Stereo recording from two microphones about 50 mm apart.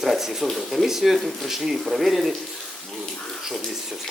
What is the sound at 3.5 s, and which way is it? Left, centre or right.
Speech, centre.